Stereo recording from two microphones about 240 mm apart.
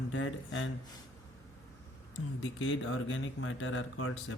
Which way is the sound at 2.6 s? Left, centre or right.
Left.